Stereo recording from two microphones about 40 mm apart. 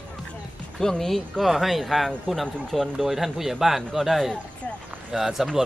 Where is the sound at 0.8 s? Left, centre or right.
Centre.